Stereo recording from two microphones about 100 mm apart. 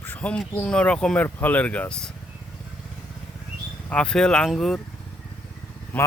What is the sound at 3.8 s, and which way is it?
Speech, 10° left (ahead or behind).